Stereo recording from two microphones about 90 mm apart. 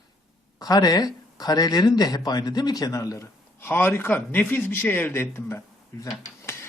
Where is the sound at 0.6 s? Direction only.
45° left (ahead or behind); by 5.6 s 30° left (ahead or behind).